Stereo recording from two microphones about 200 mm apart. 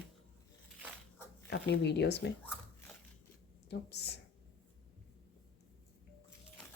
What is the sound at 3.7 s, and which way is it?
Speech, 55° left (ahead or behind).